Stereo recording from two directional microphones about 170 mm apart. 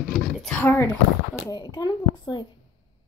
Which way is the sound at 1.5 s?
25° left (ahead or behind).